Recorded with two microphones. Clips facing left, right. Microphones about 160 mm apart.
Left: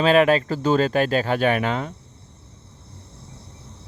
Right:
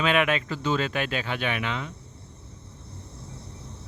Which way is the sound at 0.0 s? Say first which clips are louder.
Left 7 dB; 35° left (ahead or behind).